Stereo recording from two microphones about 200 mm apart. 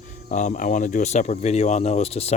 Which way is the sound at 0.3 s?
40° left (ahead or behind).